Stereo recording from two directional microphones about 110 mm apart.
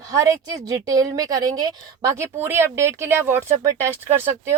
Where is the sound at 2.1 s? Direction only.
25° right (ahead or behind).